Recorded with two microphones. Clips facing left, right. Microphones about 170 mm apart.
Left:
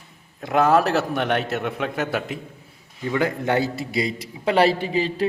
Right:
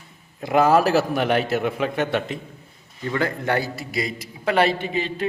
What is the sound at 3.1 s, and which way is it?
A man's voice, 15° left (ahead or behind).